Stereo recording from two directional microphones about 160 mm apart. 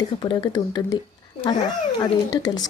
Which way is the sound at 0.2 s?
30° left (ahead or behind).